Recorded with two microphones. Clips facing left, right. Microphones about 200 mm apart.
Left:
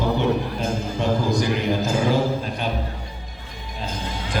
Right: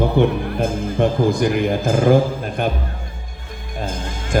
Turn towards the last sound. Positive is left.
turn(degrees=-50)  # may be behind; listen again after turning